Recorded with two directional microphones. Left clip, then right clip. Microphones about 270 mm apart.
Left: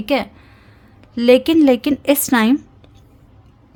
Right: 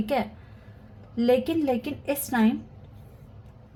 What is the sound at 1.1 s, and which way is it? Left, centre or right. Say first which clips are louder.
A woman's voice: left 11 dB; left.